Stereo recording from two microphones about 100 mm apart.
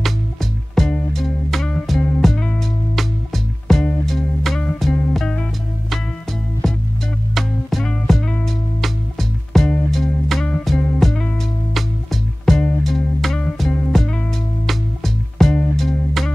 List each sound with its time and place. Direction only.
0.0 s music: 5° left (ahead or behind)
3.6 s music: 5° left (ahead or behind)
15.3 s music: 5° left (ahead or behind)